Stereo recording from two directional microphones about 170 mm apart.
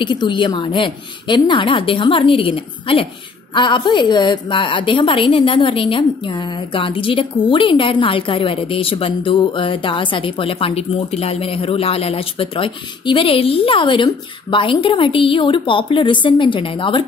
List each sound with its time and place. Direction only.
0.0 s a woman's voice: 25° left (ahead or behind)